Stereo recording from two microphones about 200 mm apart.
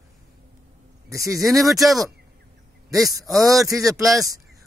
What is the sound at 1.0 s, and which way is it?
Speech, 15° right (ahead or behind).